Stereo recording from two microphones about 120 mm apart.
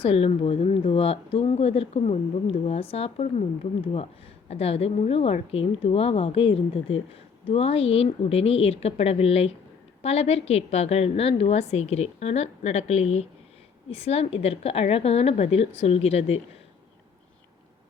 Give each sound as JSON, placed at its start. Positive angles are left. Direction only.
{"t": 0.0, "sound": "a woman's voice", "side_deg": 55}